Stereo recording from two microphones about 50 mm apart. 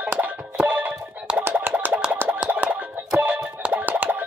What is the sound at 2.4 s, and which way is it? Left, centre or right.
Music, right.